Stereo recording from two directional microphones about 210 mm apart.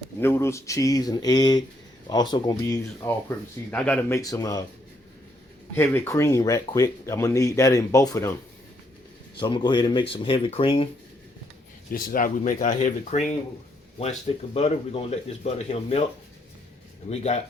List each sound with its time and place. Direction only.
0.2 s speech: 10° left (ahead or behind)
5.7 s speech: 10° left (ahead or behind)
9.4 s speech: 20° left (ahead or behind)
11.9 s speech: 40° left (ahead or behind)
17.1 s speech: 30° left (ahead or behind)